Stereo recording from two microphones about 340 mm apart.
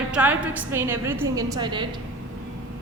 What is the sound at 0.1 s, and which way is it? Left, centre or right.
A woman's voice, centre.